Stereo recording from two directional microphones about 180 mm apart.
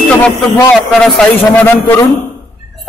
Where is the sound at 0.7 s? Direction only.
5° left (ahead or behind).